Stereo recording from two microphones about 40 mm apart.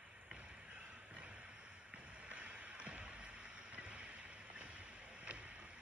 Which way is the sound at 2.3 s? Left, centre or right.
Right.